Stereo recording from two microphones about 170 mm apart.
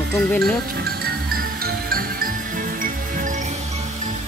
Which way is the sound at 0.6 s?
65° right (ahead or behind).